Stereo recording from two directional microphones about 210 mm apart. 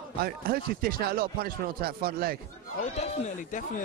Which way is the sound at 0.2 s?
45° right (ahead or behind).